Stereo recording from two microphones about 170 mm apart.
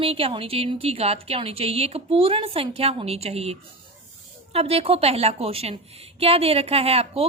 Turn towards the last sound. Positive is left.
turn(degrees=-35)  # may be behind; listen again after turning